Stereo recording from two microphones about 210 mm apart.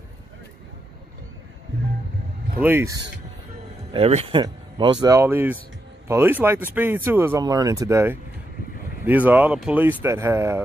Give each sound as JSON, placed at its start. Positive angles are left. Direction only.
{"t": 2.6, "sound": "speech", "side_deg": -10}
{"t": 3.9, "sound": "speech", "side_deg": -30}